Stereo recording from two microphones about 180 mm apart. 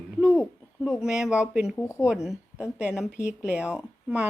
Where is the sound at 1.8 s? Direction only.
15° left (ahead or behind).